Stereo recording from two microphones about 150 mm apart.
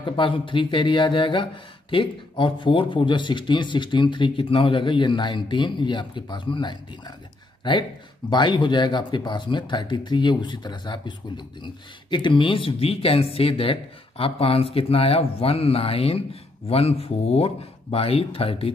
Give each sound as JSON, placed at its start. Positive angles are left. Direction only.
{"t": 0.0, "sound": "speech", "side_deg": 35}
{"t": 8.3, "sound": "speech", "side_deg": 30}